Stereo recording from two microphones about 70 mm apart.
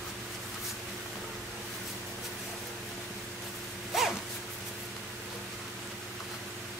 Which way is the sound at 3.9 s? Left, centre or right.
Centre.